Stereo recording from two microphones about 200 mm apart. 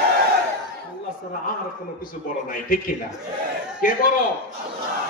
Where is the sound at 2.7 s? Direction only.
45° left (ahead or behind).